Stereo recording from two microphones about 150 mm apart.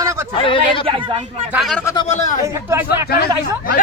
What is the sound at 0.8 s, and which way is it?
Speech, 40° right (ahead or behind).